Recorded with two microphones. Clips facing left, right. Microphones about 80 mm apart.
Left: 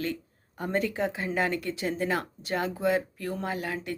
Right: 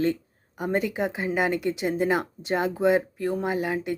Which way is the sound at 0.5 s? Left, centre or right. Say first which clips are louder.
Right 3 dB; centre.